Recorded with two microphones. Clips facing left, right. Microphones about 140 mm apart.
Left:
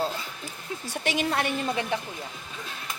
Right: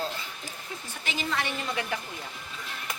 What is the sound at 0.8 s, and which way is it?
Speech, 70° left (ahead or behind).